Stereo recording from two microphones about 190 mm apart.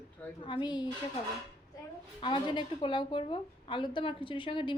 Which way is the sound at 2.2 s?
25° left (ahead or behind).